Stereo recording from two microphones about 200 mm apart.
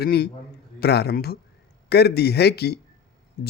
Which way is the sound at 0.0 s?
50° left (ahead or behind).